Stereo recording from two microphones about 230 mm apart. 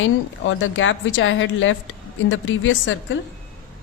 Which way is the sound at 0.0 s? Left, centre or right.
Left.